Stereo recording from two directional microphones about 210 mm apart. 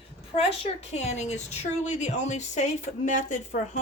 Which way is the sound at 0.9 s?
35° left (ahead or behind).